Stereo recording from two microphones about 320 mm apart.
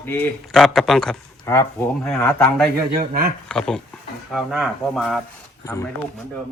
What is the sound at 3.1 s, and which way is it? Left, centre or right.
Speech, right.